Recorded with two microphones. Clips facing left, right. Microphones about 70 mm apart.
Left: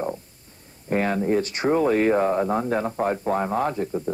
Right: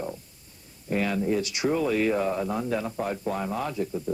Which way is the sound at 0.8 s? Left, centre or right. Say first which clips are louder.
Left 4 dB; left.